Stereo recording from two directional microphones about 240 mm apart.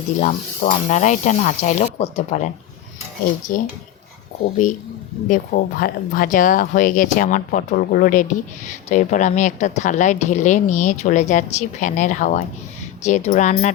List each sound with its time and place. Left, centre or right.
0.2 s speech: left
3.5 s speech: left
5.3 s speech: left